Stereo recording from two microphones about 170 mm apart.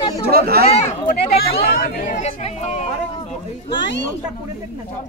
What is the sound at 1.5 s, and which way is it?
Speech, 60° left (ahead or behind).